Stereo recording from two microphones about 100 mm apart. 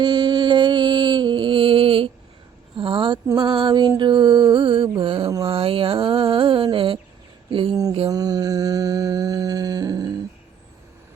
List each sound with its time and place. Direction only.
0.0 s a sound: 45° right (ahead or behind)
3.3 s mantra: 55° right (ahead or behind)
8.1 s mantra: 40° right (ahead or behind)